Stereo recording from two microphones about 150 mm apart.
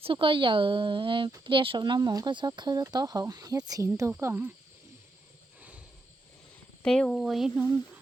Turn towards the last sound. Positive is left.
turn(degrees=-5)  # may be behind; listen again after turning